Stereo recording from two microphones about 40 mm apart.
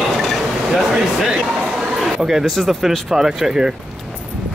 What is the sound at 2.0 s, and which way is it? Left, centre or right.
Speech, centre.